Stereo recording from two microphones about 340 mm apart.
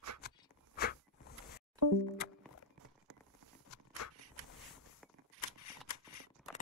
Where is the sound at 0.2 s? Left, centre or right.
Left.